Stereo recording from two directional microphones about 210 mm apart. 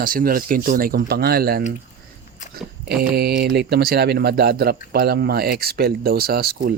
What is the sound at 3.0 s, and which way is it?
Speech, 50° right (ahead or behind).